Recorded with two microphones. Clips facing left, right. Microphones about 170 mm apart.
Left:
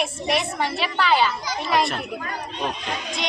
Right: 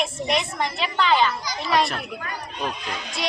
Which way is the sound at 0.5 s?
5° left (ahead or behind).